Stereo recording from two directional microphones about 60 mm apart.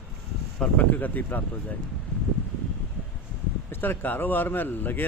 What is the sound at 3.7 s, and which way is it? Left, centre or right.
Speech, left.